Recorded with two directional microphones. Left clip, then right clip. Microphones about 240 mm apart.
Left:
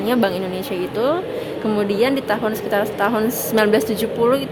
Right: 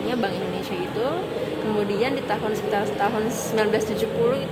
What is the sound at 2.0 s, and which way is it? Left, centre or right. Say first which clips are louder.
A woman's voice: left 6 dB; left.